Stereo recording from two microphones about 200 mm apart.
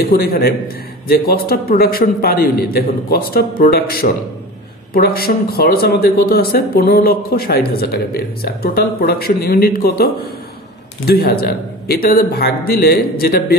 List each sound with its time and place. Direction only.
0.0 s speech: 50° left (ahead or behind)
11.1 s speech: 50° left (ahead or behind)